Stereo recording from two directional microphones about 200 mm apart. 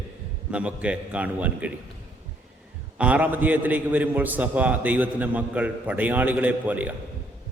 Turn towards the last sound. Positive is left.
turn(degrees=-5)  # may be behind; listen again after turning